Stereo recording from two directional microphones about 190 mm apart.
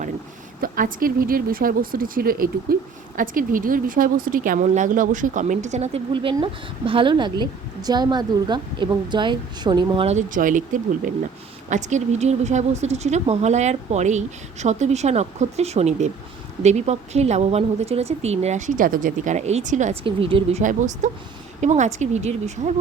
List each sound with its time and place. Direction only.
0.6 s a woman's voice: 50° right (ahead or behind)
11.7 s a woman's voice: 40° right (ahead or behind)
20.1 s speech: 30° right (ahead or behind)
20.6 s a woman's voice: 40° right (ahead or behind)